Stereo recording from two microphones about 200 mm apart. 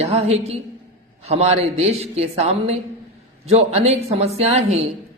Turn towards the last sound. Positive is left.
turn(degrees=-35)  # may be behind; listen again after turning